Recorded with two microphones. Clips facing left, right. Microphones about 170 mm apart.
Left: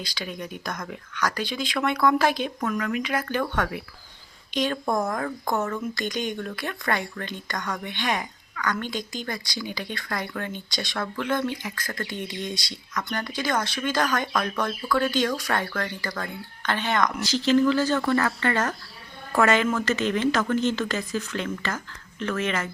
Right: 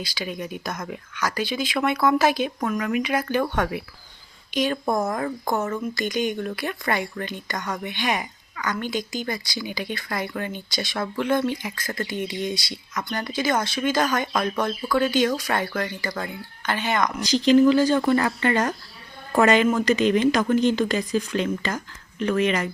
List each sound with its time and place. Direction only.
0.0 s a woman's voice: 10° right (ahead or behind)
5.9 s a woman's voice: 5° right (ahead or behind)
17.2 s a woman's voice: 15° right (ahead or behind)